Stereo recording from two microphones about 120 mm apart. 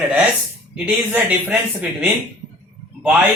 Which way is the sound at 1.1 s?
15° right (ahead or behind).